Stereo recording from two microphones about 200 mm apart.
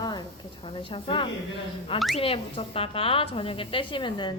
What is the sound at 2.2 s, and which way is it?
A woman's voice, 30° left (ahead or behind).